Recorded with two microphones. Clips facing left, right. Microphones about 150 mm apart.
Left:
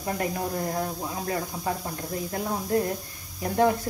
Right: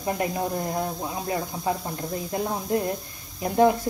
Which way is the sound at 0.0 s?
15° right (ahead or behind).